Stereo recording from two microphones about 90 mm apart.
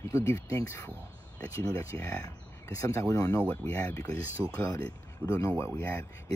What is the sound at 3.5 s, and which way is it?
Speech, 15° left (ahead or behind).